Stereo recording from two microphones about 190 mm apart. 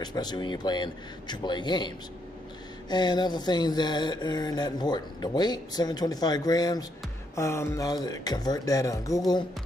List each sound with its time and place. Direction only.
0.0 s speech: 20° left (ahead or behind)